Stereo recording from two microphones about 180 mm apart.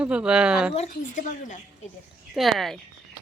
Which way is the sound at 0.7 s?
40° left (ahead or behind).